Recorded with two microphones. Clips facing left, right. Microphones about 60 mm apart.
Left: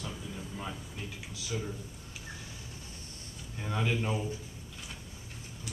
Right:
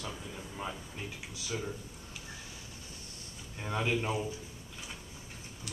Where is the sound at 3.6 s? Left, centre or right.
Centre.